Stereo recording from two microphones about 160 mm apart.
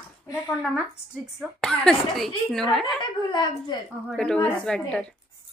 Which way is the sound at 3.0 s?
30° left (ahead or behind).